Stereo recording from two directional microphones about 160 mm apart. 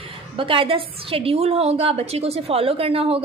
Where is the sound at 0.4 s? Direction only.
35° right (ahead or behind).